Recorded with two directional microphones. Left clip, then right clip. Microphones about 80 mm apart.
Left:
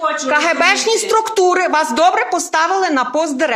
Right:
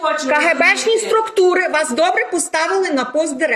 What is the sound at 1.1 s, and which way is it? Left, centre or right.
A woman's voice, left.